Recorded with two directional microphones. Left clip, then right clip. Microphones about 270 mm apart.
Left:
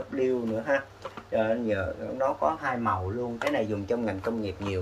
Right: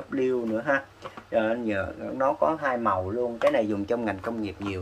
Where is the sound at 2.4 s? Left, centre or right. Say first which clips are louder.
Right 3 dB; right.